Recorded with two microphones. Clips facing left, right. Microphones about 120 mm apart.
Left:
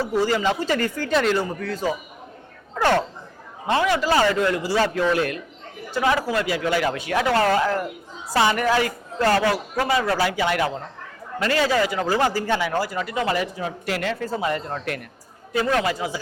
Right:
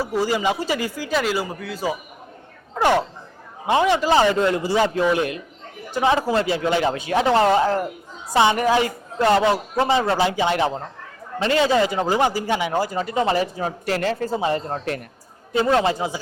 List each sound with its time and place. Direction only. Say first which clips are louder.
0.0 s a woman's voice: even; 10° right (ahead or behind); by 16.2 s 25° right (ahead or behind)